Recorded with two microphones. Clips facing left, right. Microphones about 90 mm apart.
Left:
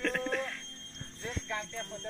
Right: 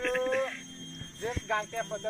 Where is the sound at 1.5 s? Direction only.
60° right (ahead or behind).